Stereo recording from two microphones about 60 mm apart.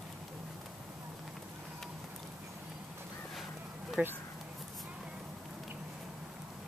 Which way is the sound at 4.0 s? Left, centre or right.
Right.